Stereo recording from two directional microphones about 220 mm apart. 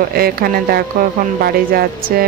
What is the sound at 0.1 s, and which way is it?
Speech, 45° right (ahead or behind).